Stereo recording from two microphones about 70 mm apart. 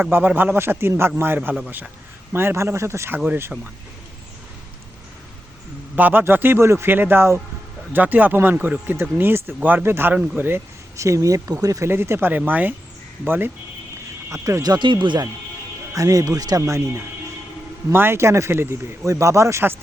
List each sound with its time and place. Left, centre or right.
0.0 s a man's voice: right
6.0 s a man's voice: right
8.5 s speech: centre
8.9 s a man's voice: right
9.8 s a man's voice: right
10.1 s speech: right
10.9 s speech: right
11.9 s a man's voice: right
14.3 s speech: right
14.6 s speech: right
16.0 s speech: right
16.6 s speech: right
17.9 s a man's voice: right